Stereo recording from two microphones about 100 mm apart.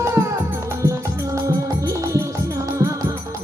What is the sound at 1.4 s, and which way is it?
Music, 35° right (ahead or behind).